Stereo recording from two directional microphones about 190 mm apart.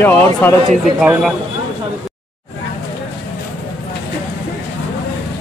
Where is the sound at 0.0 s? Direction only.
10° left (ahead or behind).